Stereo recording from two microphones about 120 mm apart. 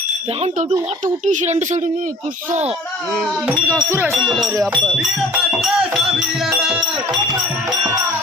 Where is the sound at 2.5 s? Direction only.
65° right (ahead or behind).